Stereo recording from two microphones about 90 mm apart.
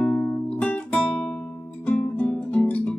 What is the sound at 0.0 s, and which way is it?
Music, 10° left (ahead or behind).